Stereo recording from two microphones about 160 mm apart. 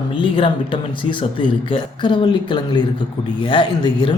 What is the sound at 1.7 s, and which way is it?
Speech, 30° left (ahead or behind).